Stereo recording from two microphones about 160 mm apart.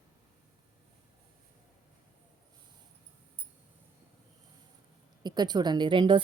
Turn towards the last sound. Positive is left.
turn(degrees=-30)  # may be behind; listen again after turning